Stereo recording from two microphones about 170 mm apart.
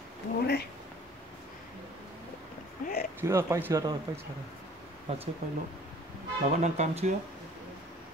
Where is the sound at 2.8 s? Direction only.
55° left (ahead or behind).